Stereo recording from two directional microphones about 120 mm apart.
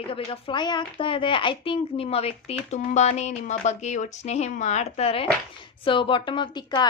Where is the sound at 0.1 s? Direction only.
50° left (ahead or behind).